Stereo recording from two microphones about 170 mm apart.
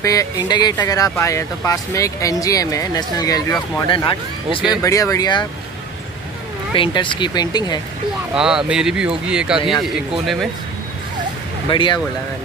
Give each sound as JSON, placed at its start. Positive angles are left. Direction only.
{"t": 0.0, "sound": "speech", "side_deg": 20}
{"t": 4.8, "sound": "speech", "side_deg": 20}
{"t": 6.7, "sound": "speech", "side_deg": 30}
{"t": 8.4, "sound": "speech", "side_deg": -5}
{"t": 11.7, "sound": "speech", "side_deg": 25}